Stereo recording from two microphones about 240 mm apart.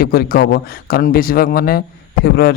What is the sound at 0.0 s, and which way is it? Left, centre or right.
Speech, left.